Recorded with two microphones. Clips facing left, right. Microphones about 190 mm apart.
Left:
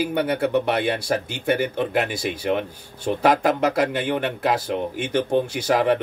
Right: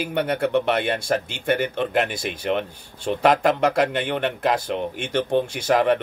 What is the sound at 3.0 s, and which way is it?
Speech, 10° left (ahead or behind).